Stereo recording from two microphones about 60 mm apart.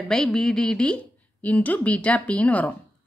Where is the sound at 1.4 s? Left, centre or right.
Left.